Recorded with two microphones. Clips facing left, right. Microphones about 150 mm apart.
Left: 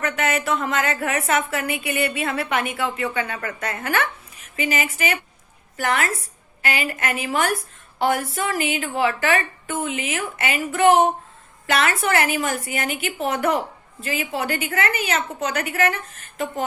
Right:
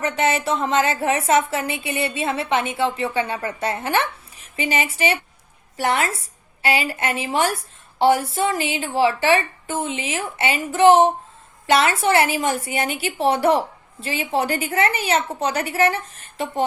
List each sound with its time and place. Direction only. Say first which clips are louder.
0.0 s a woman's voice: right 2 dB; 30° right (ahead or behind)